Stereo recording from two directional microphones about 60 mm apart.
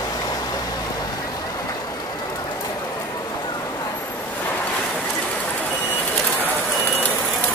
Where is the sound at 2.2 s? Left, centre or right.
Left.